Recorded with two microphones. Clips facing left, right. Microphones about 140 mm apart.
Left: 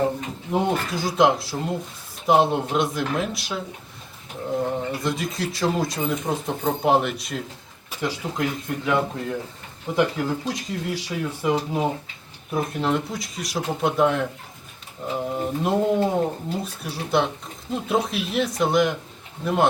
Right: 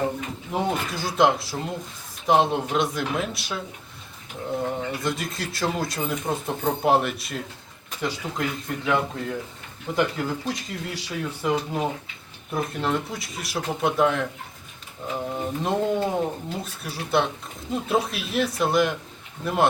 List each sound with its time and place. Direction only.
0.5 s speech: centre (ahead or behind)
4.9 s speech: centre (ahead or behind)